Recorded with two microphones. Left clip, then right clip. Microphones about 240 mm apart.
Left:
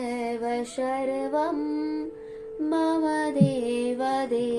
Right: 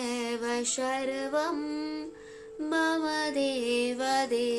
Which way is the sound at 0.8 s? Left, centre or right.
Right.